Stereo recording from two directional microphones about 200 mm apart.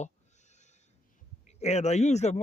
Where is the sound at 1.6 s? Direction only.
35° left (ahead or behind).